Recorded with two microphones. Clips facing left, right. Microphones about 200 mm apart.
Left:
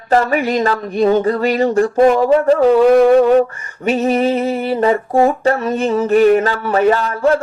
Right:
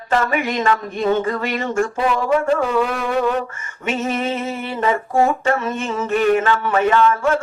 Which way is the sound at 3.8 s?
35° left (ahead or behind).